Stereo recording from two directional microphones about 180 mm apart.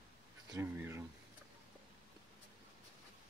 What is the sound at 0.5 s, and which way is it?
Speech, 10° right (ahead or behind).